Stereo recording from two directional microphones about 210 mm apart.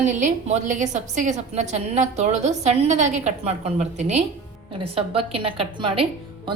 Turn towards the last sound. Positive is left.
turn(degrees=-25)  # may be behind; listen again after turning